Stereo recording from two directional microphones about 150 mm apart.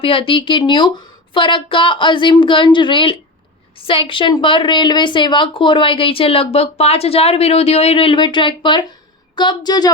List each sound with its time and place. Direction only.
0.0 s a woman's voice: 35° left (ahead or behind)